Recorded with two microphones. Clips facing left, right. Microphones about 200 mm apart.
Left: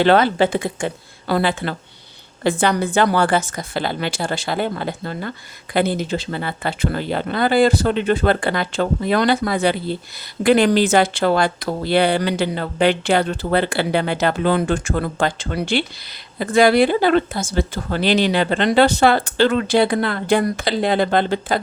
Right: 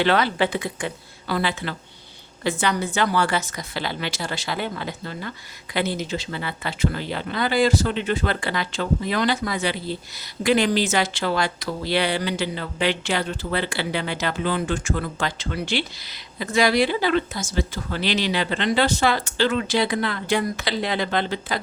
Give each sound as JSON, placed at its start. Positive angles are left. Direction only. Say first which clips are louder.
{"t": 0.0, "sound": "speech", "louder": "left 6 dB", "side_deg": 45}